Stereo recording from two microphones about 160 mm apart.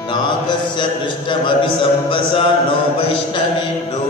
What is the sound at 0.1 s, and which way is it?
Music, 30° left (ahead or behind).